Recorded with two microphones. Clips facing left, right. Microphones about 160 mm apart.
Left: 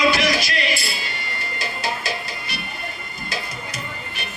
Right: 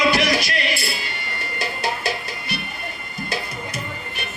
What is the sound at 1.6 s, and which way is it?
Music, 60° right (ahead or behind).